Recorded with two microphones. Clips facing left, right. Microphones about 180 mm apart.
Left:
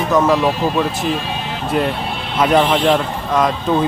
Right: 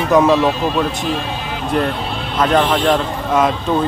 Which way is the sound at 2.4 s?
10° left (ahead or behind).